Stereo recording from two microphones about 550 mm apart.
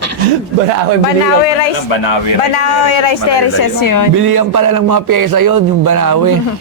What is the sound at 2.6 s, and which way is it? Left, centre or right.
Speech, left.